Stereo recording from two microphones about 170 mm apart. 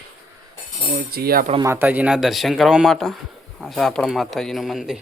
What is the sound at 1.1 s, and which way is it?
Speech, 60° right (ahead or behind).